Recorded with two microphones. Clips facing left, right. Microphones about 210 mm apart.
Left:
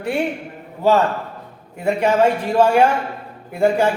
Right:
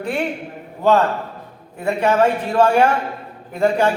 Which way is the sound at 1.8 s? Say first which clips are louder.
Left 1 dB; 10° left (ahead or behind).